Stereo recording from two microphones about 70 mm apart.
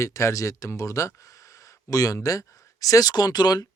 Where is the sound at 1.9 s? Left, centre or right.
Left.